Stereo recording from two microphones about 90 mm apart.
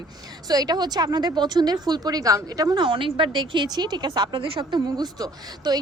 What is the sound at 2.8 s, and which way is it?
A woman's voice, 65° right (ahead or behind).